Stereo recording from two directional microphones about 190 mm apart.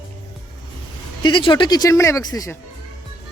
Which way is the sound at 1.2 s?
25° left (ahead or behind).